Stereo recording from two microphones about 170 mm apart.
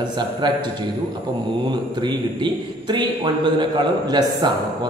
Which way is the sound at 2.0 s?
25° right (ahead or behind).